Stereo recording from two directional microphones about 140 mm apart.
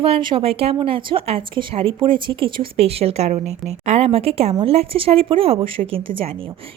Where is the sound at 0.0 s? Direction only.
40° right (ahead or behind).